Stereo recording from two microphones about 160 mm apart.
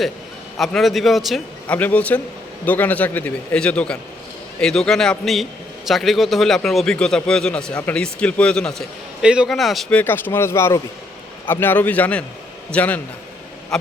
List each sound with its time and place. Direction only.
0.6 s a man's voice: centre (ahead or behind)
10.0 s a man's voice: 10° left (ahead or behind)